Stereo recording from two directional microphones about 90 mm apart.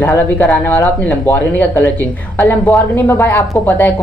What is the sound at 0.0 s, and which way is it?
Speech, 20° left (ahead or behind).